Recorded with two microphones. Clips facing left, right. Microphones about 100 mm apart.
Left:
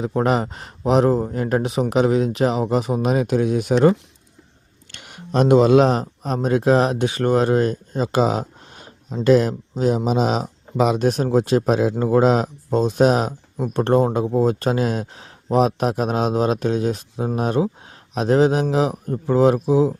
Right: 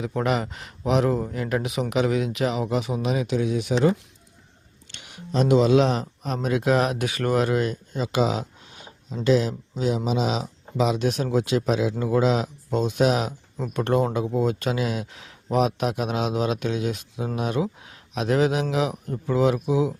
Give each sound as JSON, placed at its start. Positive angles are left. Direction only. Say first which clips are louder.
{"t": 0.2, "sound": "speech", "louder": "left 5 dB", "side_deg": 35}